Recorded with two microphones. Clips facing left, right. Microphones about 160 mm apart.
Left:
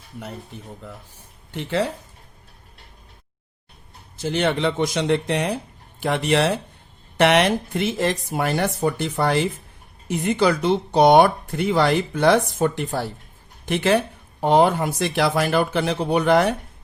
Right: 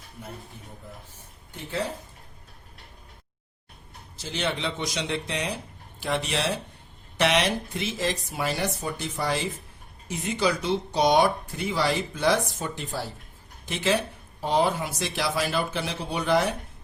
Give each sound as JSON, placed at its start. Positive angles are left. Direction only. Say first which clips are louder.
{"t": 1.5, "sound": "speech", "louder": "left 7 dB", "side_deg": 70}
{"t": 4.2, "sound": "speech", "louder": "left 8 dB", "side_deg": 55}